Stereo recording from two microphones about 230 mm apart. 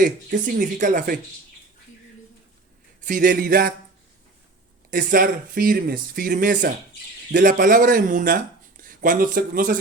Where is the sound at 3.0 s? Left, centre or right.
Right.